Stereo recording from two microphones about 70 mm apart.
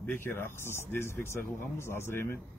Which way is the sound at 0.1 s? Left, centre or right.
Left.